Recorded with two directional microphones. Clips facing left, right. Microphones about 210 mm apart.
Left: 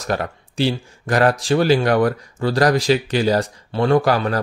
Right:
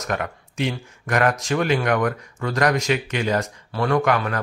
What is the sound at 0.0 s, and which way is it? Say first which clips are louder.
A man's voice: left 3 dB; 35° left (ahead or behind).